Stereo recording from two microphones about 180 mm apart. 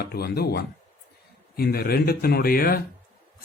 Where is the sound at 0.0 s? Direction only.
60° left (ahead or behind).